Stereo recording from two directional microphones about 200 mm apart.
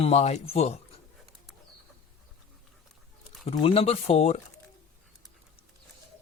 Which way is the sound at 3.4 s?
25° left (ahead or behind).